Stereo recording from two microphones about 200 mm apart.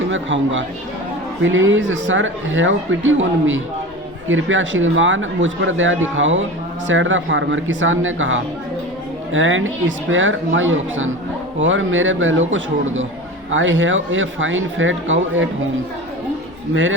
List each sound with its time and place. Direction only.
0.1 s speech: 75° right (ahead or behind)